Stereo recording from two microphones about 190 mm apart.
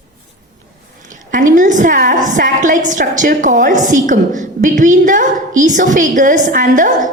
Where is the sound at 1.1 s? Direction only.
45° right (ahead or behind).